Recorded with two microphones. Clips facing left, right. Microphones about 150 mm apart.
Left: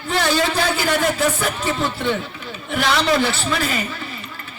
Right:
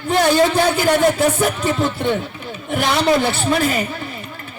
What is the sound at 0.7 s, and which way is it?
Speech, 50° right (ahead or behind).